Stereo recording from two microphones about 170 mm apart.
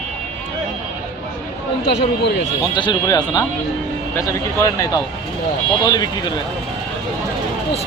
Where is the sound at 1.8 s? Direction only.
85° left.